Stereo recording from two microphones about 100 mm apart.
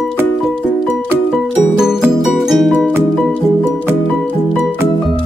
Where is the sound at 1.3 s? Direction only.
5° right (ahead or behind).